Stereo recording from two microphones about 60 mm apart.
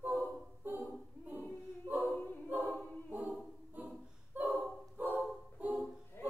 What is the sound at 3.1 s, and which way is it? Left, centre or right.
A capella, right.